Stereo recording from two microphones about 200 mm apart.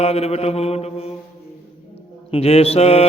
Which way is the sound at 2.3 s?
30° left (ahead or behind).